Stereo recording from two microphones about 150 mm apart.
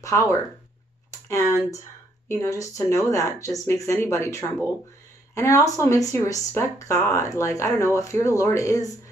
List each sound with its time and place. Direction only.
0.0 s speech: 20° left (ahead or behind)